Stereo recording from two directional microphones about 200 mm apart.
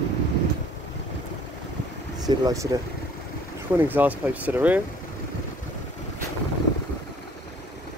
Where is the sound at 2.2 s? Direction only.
15° right (ahead or behind).